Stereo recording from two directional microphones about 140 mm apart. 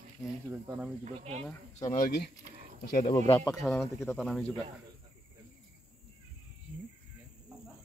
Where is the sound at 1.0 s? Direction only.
55° right (ahead or behind).